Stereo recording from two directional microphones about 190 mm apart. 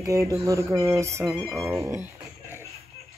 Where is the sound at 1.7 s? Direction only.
15° right (ahead or behind).